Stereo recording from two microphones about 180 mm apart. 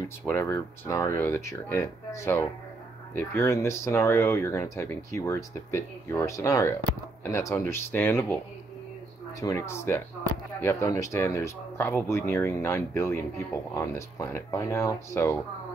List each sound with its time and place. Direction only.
0.3 s speech: 15° left (ahead or behind)
9.4 s speech: 15° left (ahead or behind)